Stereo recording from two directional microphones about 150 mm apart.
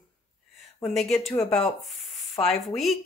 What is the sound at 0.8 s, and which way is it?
Speech, centre (ahead or behind).